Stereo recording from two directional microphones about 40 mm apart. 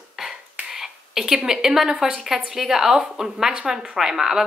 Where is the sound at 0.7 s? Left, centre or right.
Centre.